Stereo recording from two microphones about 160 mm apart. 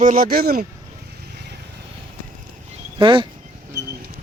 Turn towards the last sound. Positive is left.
turn(degrees=-30)  # may be behind; listen again after turning